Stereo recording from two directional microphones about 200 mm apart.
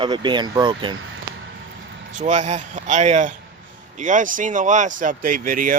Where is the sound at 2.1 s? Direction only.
40° right (ahead or behind).